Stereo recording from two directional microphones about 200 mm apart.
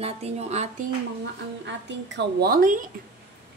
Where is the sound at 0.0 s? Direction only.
30° right (ahead or behind).